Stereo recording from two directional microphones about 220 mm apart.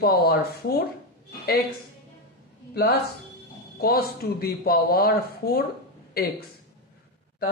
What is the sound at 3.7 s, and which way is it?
Speech, 45° left (ahead or behind).